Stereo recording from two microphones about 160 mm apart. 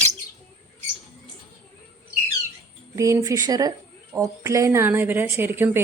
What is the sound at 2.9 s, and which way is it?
A woman's voice, 20° right (ahead or behind).